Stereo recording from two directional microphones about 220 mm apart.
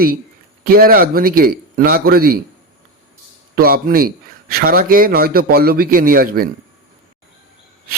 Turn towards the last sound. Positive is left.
turn(degrees=-40)  # may be behind; listen again after turning